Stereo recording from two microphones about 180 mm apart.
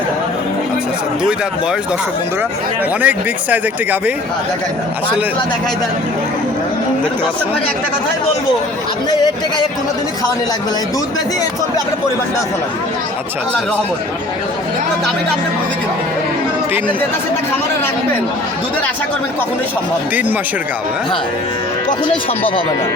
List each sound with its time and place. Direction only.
3.0 s speech: 10° right (ahead or behind)
9.0 s speech: 25° left (ahead or behind)